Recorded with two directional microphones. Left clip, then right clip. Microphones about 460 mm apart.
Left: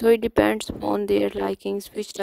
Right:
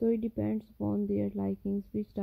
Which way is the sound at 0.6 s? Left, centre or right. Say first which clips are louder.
Left 10 dB; left.